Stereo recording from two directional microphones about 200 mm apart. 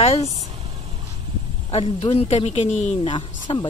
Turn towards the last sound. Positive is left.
turn(degrees=25)  # may be behind; listen again after turning